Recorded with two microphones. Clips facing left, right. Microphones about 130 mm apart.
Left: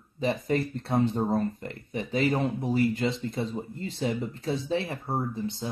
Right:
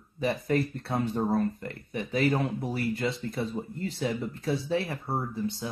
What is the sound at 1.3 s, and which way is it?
Speech, 25° left (ahead or behind).